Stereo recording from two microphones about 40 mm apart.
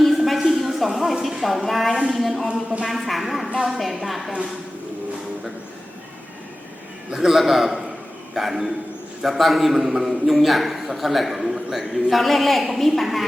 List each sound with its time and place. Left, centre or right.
0.0 s a sound: centre
2.0 s a man's voice: centre
7.1 s a man's voice: centre
7.3 s a man's voice: centre